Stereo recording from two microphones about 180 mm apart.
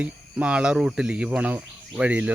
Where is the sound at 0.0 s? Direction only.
5° right (ahead or behind).